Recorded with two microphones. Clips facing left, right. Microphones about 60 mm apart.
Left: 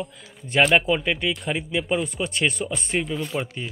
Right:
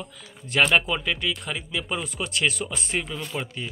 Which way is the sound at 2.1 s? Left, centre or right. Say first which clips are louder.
Left 2 dB; centre.